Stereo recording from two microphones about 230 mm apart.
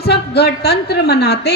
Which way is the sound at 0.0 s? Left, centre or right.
Left.